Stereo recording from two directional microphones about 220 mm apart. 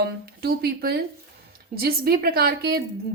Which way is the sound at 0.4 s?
45° right (ahead or behind).